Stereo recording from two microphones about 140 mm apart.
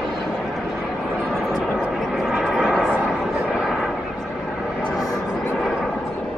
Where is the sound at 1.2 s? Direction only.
Centre (ahead or behind).